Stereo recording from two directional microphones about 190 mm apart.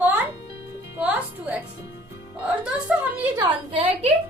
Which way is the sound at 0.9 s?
5° right (ahead or behind).